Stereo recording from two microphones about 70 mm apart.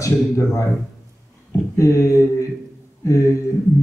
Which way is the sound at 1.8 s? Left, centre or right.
Left.